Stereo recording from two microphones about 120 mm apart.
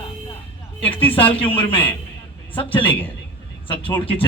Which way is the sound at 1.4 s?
45° left (ahead or behind).